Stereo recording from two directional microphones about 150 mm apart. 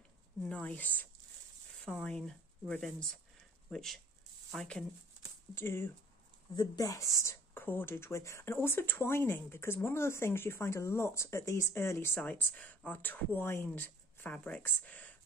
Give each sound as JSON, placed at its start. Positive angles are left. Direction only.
{"t": 0.4, "sound": "speech", "side_deg": 10}
{"t": 5.5, "sound": "speech", "side_deg": 15}
{"t": 6.5, "sound": "speech", "side_deg": 25}